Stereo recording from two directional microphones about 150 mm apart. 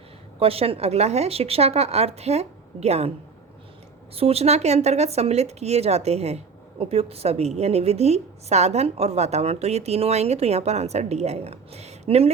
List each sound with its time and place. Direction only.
0.3 s speech: 40° right (ahead or behind)
4.1 s speech: 40° right (ahead or behind)